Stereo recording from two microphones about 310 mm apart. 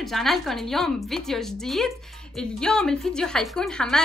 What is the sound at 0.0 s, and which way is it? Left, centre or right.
Speech, centre.